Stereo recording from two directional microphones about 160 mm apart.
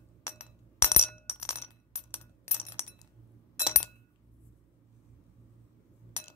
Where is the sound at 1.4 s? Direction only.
15° left (ahead or behind).